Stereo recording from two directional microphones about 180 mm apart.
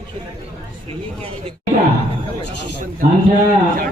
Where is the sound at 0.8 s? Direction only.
30° right (ahead or behind).